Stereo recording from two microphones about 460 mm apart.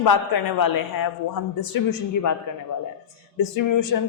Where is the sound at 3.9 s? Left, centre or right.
Left.